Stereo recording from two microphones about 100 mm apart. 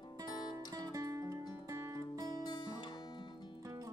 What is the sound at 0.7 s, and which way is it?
Music, 35° right (ahead or behind).